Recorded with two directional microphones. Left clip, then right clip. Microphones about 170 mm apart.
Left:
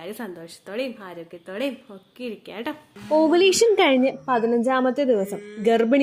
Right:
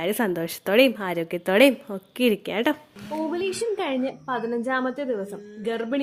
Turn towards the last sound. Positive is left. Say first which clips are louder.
# left 8 dB
turn(degrees=35)  # may be behind; listen again after turning